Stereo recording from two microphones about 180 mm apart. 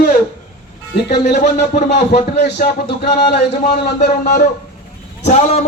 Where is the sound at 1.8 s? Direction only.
40° left (ahead or behind).